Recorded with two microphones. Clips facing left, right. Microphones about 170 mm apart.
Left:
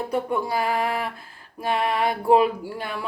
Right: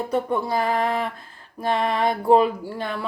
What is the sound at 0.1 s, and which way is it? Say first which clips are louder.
Speech: right 2 dB; 10° left (ahead or behind).